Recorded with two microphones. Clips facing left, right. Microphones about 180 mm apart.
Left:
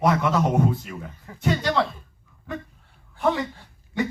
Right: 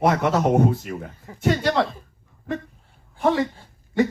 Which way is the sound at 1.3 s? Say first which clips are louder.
Right 1 dB; 25° right (ahead or behind).